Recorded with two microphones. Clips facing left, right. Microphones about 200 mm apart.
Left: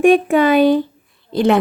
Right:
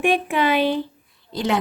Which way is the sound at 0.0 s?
45° left (ahead or behind).